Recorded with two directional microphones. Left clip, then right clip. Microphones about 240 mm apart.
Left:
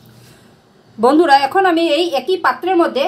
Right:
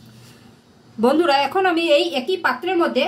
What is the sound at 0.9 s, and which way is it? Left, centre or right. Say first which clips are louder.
A woman's voice: left 6 dB; left.